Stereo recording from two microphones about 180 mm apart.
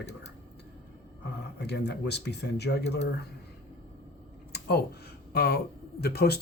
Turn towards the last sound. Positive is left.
turn(degrees=60)  # may be behind; listen again after turning